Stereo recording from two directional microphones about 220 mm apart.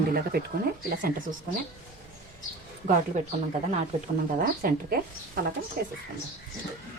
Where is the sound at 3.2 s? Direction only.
35° right (ahead or behind).